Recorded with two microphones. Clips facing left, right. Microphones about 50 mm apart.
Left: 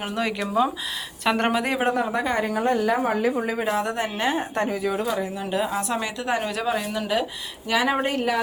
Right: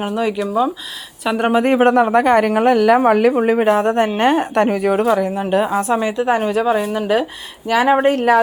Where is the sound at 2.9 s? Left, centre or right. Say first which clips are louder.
Right 10 dB; right.